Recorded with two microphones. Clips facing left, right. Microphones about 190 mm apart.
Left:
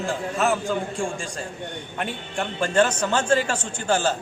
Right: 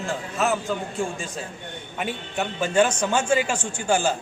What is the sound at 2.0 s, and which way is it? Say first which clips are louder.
A man's voice: right 1 dB; 5° right (ahead or behind).